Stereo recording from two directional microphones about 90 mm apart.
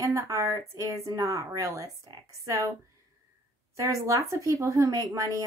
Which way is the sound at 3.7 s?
35° right (ahead or behind).